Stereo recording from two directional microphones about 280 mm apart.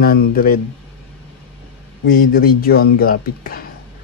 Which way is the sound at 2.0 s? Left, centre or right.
Left.